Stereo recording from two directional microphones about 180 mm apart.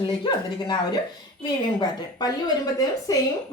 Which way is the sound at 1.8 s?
20° left (ahead or behind).